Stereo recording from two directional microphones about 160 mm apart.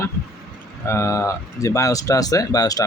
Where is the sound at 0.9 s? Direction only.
15° left (ahead or behind).